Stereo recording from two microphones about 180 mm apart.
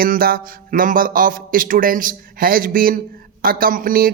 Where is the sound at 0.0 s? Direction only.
55° right (ahead or behind).